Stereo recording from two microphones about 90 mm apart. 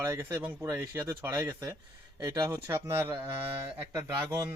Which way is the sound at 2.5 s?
30° right (ahead or behind).